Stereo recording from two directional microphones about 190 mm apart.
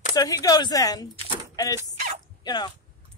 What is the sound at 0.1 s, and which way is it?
Speech, 20° left (ahead or behind).